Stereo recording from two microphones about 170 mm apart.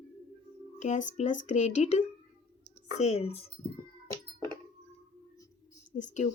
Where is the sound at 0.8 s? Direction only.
45° left (ahead or behind).